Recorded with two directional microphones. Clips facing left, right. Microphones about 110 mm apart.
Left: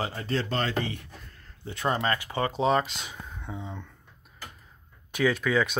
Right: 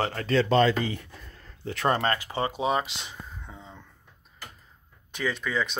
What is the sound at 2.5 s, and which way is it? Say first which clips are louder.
Speech: left 4 dB; 10° right (ahead or behind).